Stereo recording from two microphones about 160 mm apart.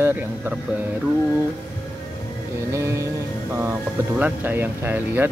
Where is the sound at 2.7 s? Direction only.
20° right (ahead or behind).